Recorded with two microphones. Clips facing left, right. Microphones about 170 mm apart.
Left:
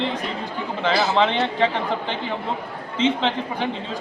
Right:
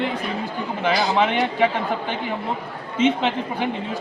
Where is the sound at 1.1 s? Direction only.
15° right (ahead or behind).